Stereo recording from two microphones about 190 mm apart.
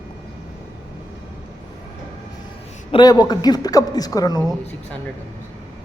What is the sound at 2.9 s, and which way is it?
A woman's voice, 20° left (ahead or behind).